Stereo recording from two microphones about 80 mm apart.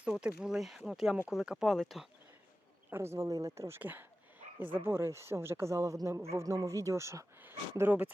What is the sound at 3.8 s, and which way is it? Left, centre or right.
Speech, right.